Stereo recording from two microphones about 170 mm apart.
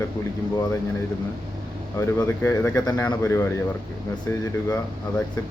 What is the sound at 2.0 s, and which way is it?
Speech, 15° left (ahead or behind).